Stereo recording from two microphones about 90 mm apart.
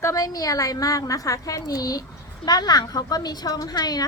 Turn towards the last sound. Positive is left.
turn(degrees=50)  # may be behind; listen again after turning